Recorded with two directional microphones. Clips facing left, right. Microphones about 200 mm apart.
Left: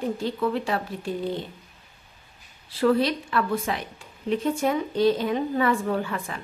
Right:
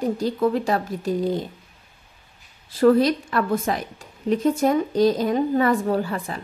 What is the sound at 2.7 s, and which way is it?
A woman's voice, 45° right (ahead or behind).